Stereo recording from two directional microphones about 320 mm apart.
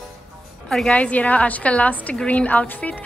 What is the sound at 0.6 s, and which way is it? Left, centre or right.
A woman's voice, centre.